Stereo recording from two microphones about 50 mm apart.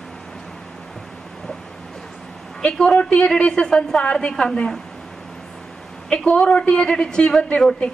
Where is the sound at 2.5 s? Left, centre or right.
Centre.